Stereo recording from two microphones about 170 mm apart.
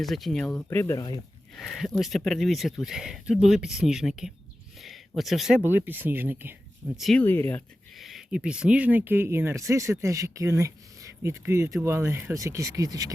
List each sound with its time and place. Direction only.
0.0 s speech: centre (ahead or behind)
0.9 s speech: 20° left (ahead or behind)
1.5 s speech: centre (ahead or behind)
4.8 s a sound: centre (ahead or behind)
5.6 s speech: 10° right (ahead or behind)
7.0 s speech: 5° left (ahead or behind)
7.9 s speech: centre (ahead or behind); by 13.1 s 20° right (ahead or behind)